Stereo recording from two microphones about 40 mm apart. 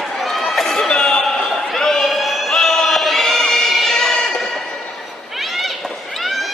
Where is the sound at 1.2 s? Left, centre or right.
Centre.